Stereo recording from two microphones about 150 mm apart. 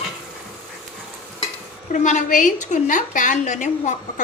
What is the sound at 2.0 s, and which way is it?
Speech, 60° left (ahead or behind).